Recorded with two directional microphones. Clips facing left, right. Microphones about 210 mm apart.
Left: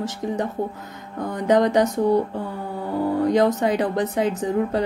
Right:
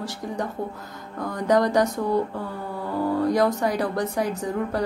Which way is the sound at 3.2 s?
20° left (ahead or behind).